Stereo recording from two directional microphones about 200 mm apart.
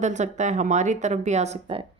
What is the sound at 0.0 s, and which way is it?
Speech, 35° right (ahead or behind).